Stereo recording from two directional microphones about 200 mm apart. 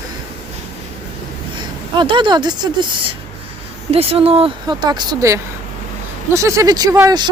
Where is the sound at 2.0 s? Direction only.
25° right (ahead or behind).